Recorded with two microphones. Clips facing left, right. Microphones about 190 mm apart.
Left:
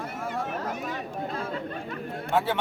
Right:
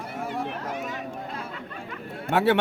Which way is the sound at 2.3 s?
65° right (ahead or behind).